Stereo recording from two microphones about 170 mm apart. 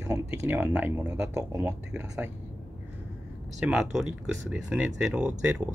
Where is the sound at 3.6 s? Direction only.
5° right (ahead or behind).